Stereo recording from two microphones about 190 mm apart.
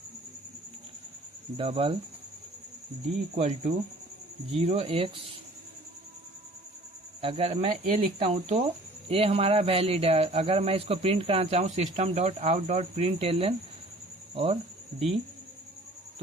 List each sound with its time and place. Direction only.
1.5 s speech: 30° right (ahead or behind)
3.3 s a man's voice: 35° right (ahead or behind)
7.2 s a man's voice: 30° right (ahead or behind)